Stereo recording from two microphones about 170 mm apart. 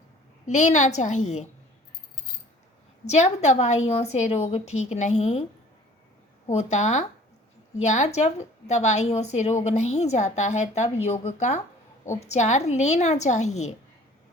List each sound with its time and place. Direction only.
0.4 s a woman's voice: 45° left (ahead or behind)
3.1 s a woman's voice: 40° left (ahead or behind)
6.5 s a woman's voice: 40° left (ahead or behind)